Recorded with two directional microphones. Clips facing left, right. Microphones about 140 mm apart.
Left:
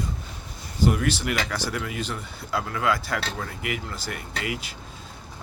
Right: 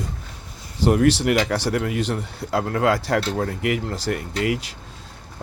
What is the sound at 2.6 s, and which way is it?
Speech, 55° right (ahead or behind).